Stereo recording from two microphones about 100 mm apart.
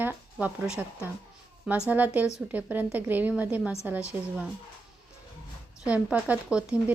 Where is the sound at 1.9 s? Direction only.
15° right (ahead or behind).